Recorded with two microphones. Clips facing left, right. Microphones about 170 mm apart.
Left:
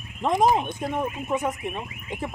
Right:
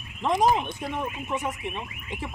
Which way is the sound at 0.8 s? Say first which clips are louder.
Left 4 dB; 45° left (ahead or behind).